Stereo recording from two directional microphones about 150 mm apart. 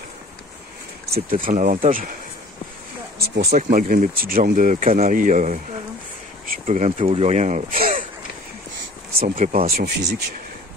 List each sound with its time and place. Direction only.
1.3 s speech: 60° right (ahead or behind)
3.5 s speech: 60° right (ahead or behind)
9.2 s speech: 65° right (ahead or behind)
9.7 s speech: 90° right